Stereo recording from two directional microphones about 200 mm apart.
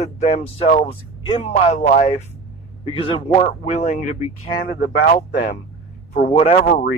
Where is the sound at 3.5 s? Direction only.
35° left (ahead or behind).